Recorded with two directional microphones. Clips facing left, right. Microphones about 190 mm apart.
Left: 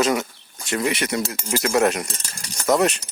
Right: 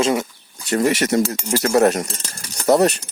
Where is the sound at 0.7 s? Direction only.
45° right (ahead or behind).